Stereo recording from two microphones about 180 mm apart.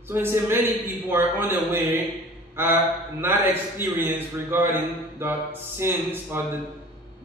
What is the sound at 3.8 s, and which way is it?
Speech, 10° right (ahead or behind).